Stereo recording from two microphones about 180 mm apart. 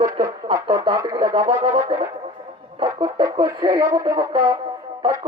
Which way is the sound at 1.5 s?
35° right (ahead or behind).